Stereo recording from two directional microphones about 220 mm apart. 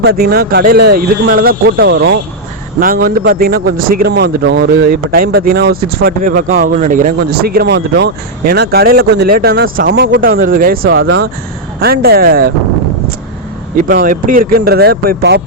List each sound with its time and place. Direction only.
0.0 s speech: 45° right (ahead or behind)
2.8 s a man's voice: 40° right (ahead or behind)
13.7 s speech: 40° right (ahead or behind)